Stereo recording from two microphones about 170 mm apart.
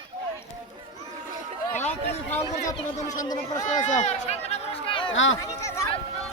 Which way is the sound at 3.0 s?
45° left (ahead or behind).